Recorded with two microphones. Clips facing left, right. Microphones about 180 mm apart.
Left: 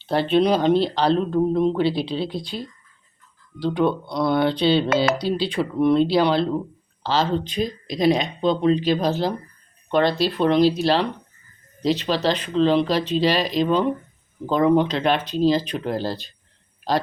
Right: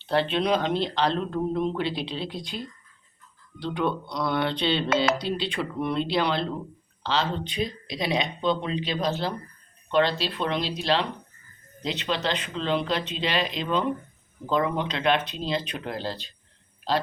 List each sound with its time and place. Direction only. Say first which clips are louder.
0.1 s speech: left 5 dB; 40° left (ahead or behind)
3.6 s speech: left 6 dB; 35° left (ahead or behind)